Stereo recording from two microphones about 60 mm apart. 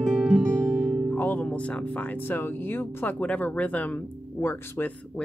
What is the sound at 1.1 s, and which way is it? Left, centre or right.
Music, left.